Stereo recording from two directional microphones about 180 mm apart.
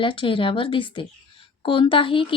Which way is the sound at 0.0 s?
30° left (ahead or behind).